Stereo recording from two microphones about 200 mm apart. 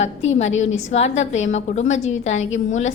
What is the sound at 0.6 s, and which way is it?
A woman's voice, 35° left (ahead or behind).